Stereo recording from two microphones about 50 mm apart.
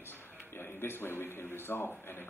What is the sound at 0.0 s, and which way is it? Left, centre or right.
A man's voice, left.